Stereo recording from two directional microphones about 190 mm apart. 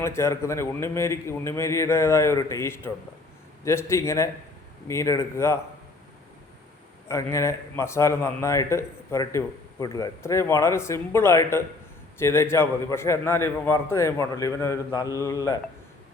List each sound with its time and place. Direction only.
0.0 s a man's voice: 15° left (ahead or behind)
7.1 s a man's voice: 15° left (ahead or behind)